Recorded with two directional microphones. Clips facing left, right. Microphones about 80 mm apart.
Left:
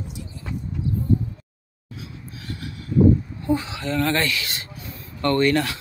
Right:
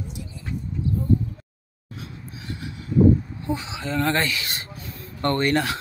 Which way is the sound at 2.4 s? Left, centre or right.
Centre.